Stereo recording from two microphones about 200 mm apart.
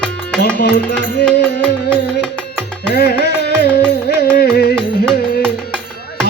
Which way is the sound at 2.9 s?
55° left (ahead or behind).